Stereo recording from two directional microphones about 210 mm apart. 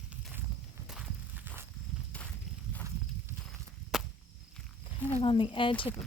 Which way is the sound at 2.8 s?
15° right (ahead or behind).